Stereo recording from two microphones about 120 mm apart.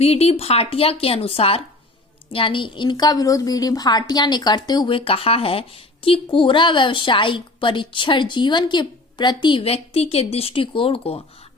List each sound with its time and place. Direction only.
0.0 s a woman's voice: 60° left (ahead or behind); by 4.9 s 35° left (ahead or behind)
4.9 s speech: 50° left (ahead or behind)